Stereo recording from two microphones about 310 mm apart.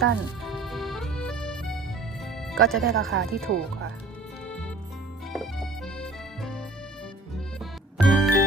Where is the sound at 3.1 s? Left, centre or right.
Right.